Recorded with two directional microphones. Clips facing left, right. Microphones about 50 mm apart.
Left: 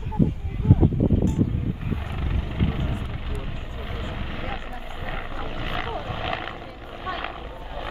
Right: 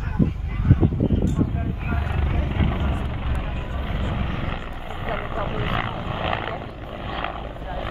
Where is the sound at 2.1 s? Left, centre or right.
Right.